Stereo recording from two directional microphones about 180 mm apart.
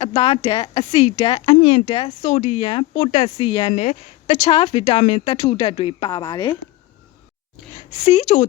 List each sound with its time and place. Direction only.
0.0 s speech: 35° left (ahead or behind)
8.0 s speech: 40° left (ahead or behind)